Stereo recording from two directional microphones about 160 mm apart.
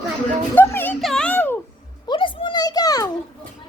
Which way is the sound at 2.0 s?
30° left (ahead or behind).